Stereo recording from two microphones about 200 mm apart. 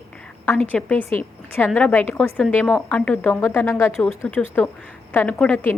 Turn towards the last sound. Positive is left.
turn(degrees=10)  # may be behind; listen again after turning